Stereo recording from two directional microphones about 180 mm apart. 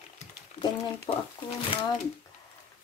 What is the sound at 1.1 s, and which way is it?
Speech, 20° left (ahead or behind).